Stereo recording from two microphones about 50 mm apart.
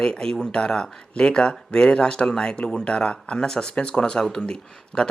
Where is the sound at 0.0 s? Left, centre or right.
Centre.